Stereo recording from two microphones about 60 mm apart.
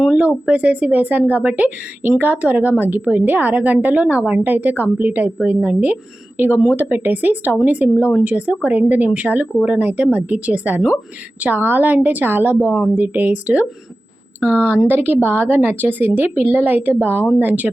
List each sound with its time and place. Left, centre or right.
0.1 s a woman's voice: centre